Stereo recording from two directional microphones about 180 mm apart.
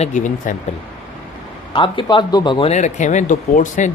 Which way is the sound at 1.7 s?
30° left (ahead or behind).